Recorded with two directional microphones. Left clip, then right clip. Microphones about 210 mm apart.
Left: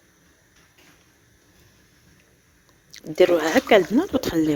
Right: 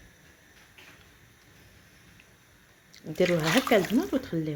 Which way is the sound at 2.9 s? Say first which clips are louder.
Left 8 dB; 50° left (ahead or behind).